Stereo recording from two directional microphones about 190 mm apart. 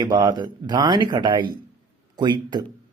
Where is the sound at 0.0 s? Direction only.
20° right (ahead or behind).